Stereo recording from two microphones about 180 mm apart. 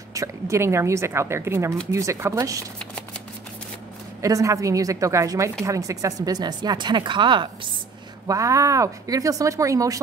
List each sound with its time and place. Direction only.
0.1 s speech: 15° right (ahead or behind)
4.2 s a woman's voice: 15° right (ahead or behind)